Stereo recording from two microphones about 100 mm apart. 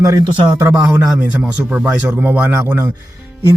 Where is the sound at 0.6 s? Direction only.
25° right (ahead or behind).